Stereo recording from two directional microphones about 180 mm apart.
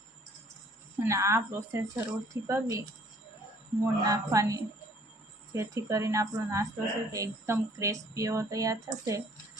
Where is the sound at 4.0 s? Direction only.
20° right (ahead or behind).